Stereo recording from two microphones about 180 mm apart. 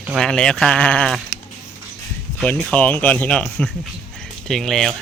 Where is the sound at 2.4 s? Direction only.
5° left (ahead or behind).